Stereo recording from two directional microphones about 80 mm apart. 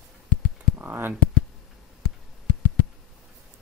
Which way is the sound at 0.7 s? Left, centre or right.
Right.